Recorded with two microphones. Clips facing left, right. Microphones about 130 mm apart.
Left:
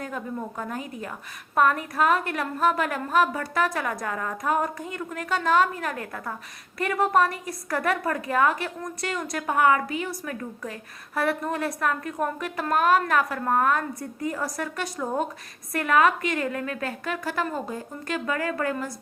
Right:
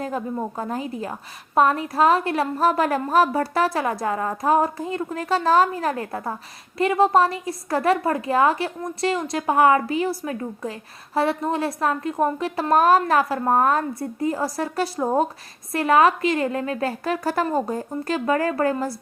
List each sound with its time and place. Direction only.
0.0 s a woman's voice: 30° right (ahead or behind)